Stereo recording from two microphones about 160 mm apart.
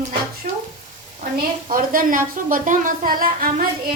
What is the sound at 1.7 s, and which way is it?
A woman's voice, 60° right (ahead or behind).